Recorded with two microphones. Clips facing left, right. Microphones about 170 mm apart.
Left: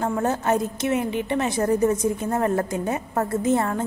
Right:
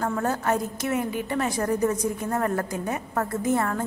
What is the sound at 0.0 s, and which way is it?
A woman's voice, 20° left (ahead or behind).